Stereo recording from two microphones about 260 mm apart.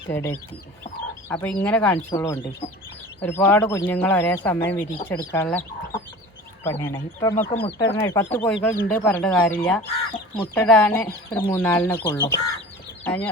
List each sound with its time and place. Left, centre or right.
0.1 s speech: centre
7.6 s speech: left
7.9 s speech: centre